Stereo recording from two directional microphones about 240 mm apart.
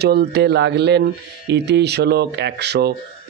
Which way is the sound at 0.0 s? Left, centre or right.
Right.